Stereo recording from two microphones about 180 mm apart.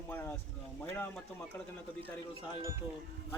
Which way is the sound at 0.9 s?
10° left (ahead or behind).